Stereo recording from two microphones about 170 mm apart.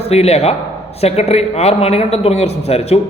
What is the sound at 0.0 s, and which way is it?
Speech, 35° left (ahead or behind).